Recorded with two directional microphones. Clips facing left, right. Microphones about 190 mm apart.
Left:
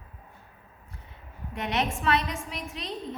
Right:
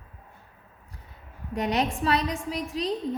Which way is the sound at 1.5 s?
35° right (ahead or behind).